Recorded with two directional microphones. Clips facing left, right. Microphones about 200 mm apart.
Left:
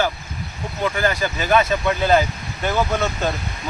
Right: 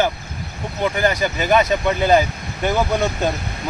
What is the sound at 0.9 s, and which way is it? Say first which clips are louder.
Speech: right 3 dB; 20° right (ahead or behind).